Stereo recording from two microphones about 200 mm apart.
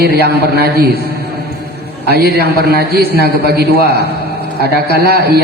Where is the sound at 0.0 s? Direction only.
50° right (ahead or behind).